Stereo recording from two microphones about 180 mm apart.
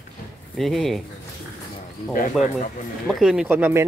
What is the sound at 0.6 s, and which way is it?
Speech, centre (ahead or behind).